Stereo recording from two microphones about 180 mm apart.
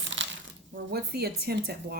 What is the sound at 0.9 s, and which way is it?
Speech, 60° right (ahead or behind).